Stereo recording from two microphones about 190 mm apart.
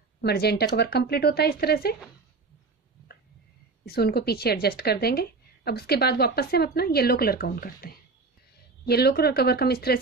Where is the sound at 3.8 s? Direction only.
55° left (ahead or behind).